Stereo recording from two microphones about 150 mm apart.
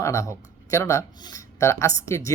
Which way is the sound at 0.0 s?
20° left (ahead or behind).